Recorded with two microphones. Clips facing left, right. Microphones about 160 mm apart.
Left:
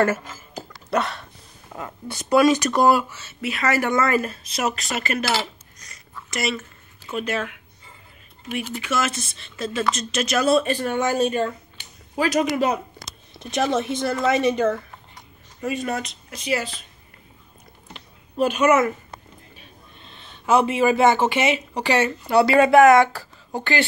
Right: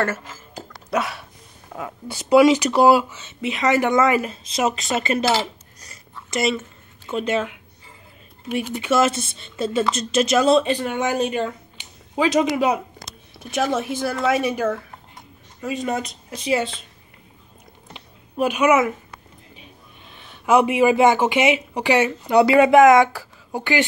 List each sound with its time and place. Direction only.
0.0 s speech: 10° left (ahead or behind); by 5.4 s 20° right (ahead or behind)
5.8 s a sound: 25° right (ahead or behind)
7.1 s speech: 25° right (ahead or behind)
8.8 s speech: 30° right (ahead or behind)
16.0 s speech: 30° right (ahead or behind)
17.9 s a sound: 10° right (ahead or behind)
19.5 s speech: 15° right (ahead or behind)